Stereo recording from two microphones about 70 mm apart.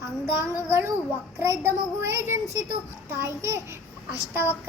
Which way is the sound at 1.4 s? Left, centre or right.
Right.